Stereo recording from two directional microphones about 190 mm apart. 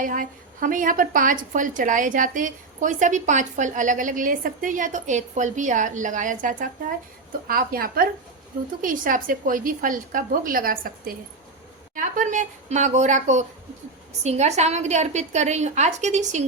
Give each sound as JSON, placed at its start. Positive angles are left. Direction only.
{"t": 0.0, "sound": "a woman's voice", "side_deg": -45}